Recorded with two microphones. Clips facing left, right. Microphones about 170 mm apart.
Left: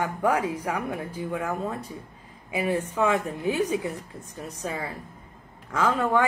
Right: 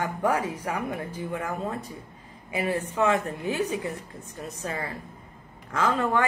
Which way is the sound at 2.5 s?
10° left (ahead or behind).